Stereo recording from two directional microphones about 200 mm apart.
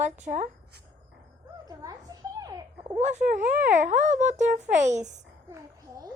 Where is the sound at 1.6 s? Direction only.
15° right (ahead or behind).